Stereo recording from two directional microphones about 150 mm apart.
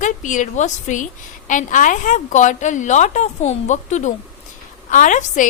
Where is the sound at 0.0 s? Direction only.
55° left (ahead or behind).